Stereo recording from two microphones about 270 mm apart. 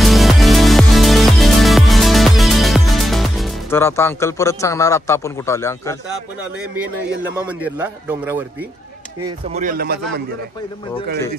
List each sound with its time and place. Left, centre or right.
0.0 s music: centre
7.3 s speech: centre
9.5 s speech: right